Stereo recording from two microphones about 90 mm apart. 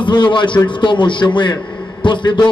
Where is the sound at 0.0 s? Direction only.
55° left (ahead or behind).